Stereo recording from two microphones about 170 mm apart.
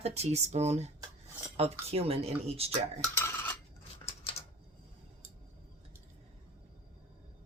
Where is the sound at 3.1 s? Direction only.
15° left (ahead or behind).